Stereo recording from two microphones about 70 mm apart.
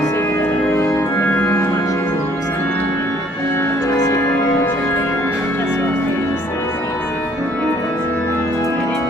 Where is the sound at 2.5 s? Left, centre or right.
Left.